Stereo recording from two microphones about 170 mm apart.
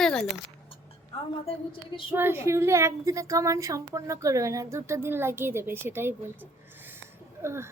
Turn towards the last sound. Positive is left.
turn(degrees=-15)  # may be behind; listen again after turning